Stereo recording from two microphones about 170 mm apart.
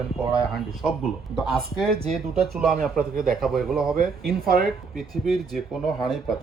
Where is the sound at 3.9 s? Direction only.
60° right (ahead or behind).